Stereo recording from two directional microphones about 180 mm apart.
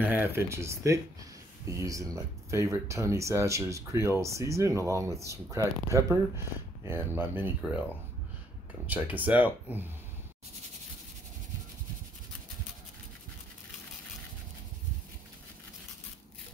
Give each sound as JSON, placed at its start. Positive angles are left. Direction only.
{"t": 0.0, "sound": "speech", "side_deg": -10}
{"t": 8.8, "sound": "speech", "side_deg": -10}